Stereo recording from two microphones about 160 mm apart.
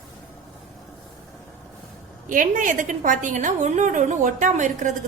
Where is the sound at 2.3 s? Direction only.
55° right (ahead or behind).